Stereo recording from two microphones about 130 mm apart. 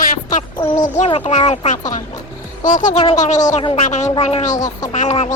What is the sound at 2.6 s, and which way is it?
Speech, 85° left.